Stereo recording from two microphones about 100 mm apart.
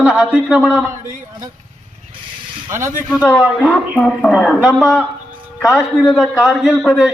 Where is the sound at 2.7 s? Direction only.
25° right (ahead or behind).